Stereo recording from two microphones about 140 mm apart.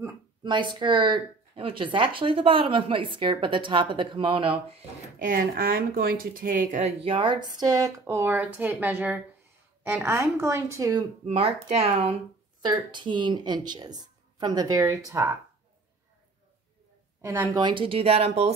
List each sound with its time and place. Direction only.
0.4 s speech: 30° right (ahead or behind)
5.2 s speech: 85° right; by 6.9 s 70° right (ahead or behind)
7.0 s speech: 40° right (ahead or behind)
11.2 s speech: 50° right (ahead or behind)
12.9 s speech: 35° right (ahead or behind)
17.2 s speech: 20° right (ahead or behind); by 18.5 s 45° right (ahead or behind)